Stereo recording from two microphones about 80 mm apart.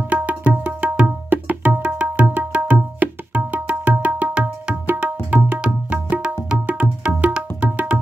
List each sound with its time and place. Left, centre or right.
0.1 s music: centre
5.0 s tabla: centre